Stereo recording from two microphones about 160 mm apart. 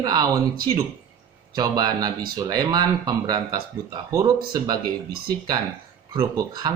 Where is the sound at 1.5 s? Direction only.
25° right (ahead or behind).